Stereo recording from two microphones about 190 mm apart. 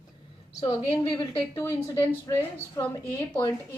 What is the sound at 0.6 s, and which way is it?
A woman's voice, 25° left (ahead or behind).